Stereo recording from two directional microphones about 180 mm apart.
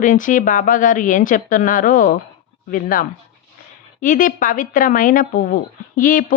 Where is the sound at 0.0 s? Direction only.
45° left (ahead or behind).